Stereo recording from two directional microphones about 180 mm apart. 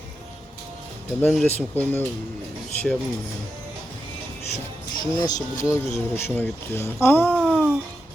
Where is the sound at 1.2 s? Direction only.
5° left (ahead or behind).